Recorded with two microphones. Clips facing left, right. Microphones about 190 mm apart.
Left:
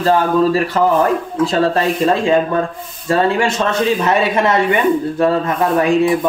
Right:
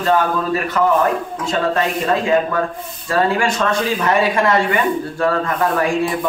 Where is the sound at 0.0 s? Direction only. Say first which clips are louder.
Left 4 dB; 30° left (ahead or behind).